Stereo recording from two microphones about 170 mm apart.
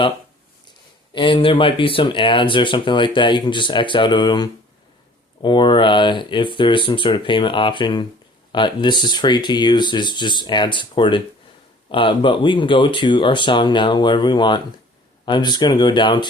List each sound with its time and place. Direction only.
1.1 s speech: 30° left (ahead or behind)